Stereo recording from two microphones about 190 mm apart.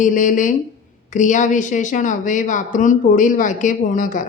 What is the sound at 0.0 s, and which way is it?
A woman's voice, 45° left (ahead or behind).